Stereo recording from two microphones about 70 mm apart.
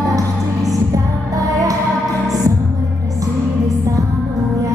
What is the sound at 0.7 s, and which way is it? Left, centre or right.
Music, right.